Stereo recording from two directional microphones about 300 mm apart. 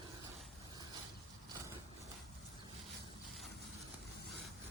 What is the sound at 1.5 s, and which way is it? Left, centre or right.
Vehicle, centre.